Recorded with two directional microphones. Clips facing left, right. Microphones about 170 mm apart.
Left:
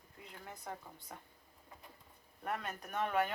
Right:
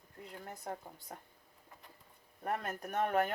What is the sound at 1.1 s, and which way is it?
Speech, 40° right (ahead or behind).